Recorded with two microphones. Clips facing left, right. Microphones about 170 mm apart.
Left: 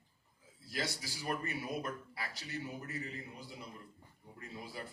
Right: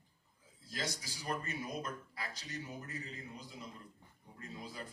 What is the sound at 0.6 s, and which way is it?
A man's voice, 20° right (ahead or behind).